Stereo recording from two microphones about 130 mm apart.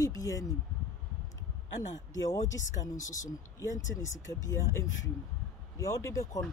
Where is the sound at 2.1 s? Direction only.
25° left (ahead or behind).